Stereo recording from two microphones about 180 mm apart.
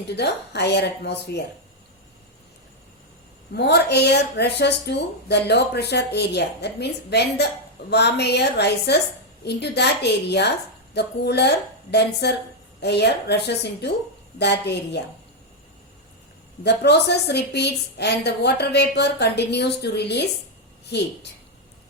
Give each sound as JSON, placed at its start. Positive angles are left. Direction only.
{"t": 0.2, "sound": "speech", "side_deg": 70}
{"t": 3.5, "sound": "speech", "side_deg": 70}
{"t": 16.6, "sound": "speech", "side_deg": 70}